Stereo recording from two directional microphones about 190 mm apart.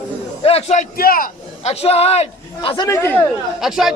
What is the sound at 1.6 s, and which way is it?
A man's voice, 35° left (ahead or behind).